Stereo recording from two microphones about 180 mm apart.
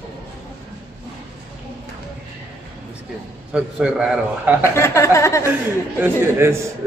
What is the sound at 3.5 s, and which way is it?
A man's voice, 5° right (ahead or behind).